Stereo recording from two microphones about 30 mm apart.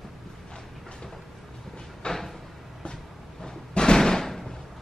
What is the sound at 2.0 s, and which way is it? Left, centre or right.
Cupboard open or close, left.